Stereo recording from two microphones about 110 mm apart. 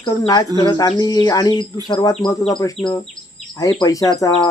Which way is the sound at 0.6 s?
35° left (ahead or behind).